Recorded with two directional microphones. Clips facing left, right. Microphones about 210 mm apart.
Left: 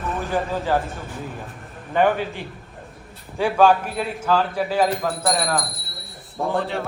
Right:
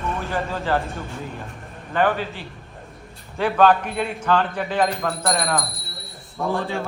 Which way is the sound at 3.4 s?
10° left (ahead or behind).